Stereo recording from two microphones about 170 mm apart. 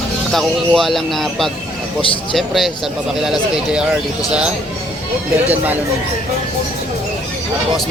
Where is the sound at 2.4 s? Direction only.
Centre (ahead or behind).